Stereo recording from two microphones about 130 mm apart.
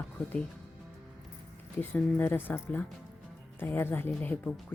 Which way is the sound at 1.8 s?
15° left (ahead or behind).